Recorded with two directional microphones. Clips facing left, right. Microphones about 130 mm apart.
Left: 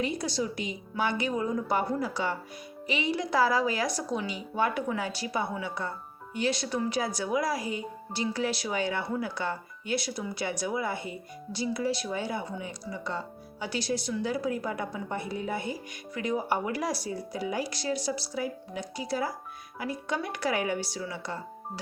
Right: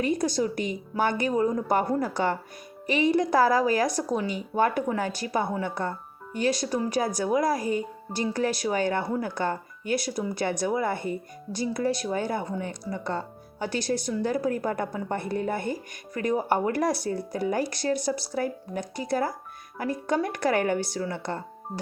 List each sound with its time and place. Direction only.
0.0 s speech: 50° right (ahead or behind)